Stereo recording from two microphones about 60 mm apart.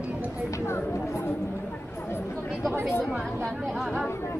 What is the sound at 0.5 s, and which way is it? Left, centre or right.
Speech, left.